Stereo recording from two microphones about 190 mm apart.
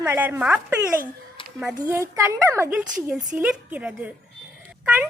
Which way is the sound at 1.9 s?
15° right (ahead or behind).